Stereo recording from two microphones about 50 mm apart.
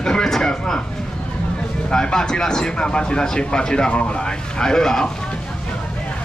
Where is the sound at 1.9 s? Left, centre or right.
Centre.